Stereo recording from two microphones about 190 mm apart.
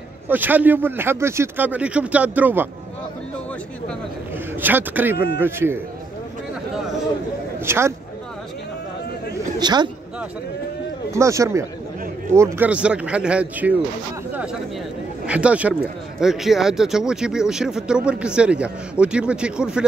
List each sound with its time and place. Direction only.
0.3 s speech: 10° right (ahead or behind)
4.6 s speech: 10° right (ahead or behind)
7.6 s speech: 15° right (ahead or behind)
9.6 s speech: 20° right (ahead or behind)
11.1 s speech: 15° right (ahead or behind)
14.3 s a sound: 5° right (ahead or behind)
15.2 s speech: 5° right (ahead or behind)